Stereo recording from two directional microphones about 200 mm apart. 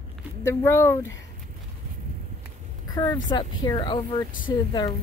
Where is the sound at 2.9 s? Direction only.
20° left (ahead or behind).